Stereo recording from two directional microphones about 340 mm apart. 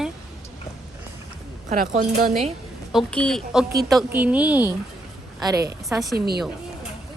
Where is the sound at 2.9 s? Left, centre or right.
Centre.